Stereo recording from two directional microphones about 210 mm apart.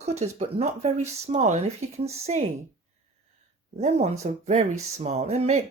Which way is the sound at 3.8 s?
30° right (ahead or behind).